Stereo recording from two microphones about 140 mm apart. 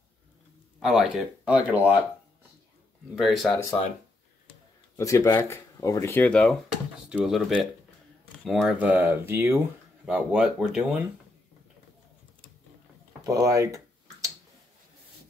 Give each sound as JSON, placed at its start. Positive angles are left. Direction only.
{"t": 0.7, "sound": "speech", "side_deg": -5}
{"t": 3.2, "sound": "speech", "side_deg": 0}
{"t": 4.9, "sound": "speech", "side_deg": 20}
{"t": 7.1, "sound": "speech", "side_deg": -5}
{"t": 13.2, "sound": "speech", "side_deg": -25}